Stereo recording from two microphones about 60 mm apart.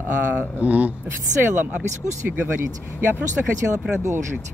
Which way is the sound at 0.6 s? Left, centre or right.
Right.